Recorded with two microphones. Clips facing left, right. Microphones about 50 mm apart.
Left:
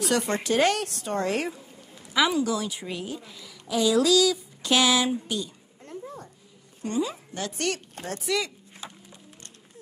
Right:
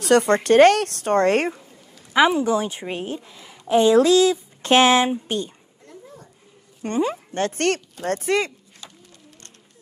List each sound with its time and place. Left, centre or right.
0.0 s speech: right
2.1 s a woman's voice: right
6.8 s speech: right